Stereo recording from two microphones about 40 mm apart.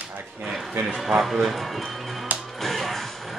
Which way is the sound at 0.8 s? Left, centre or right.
Right.